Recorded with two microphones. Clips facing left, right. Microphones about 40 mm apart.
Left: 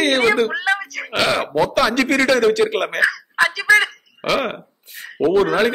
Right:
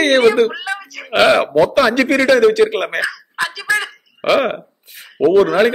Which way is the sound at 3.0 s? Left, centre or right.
Left.